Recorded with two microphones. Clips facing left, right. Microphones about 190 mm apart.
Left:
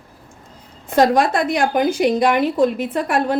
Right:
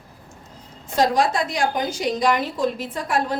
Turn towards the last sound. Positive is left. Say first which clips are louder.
# left 5 dB
turn(degrees=60)  # may be behind; listen again after turning